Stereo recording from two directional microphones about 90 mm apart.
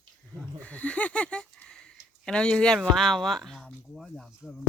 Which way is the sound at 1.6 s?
10° left (ahead or behind).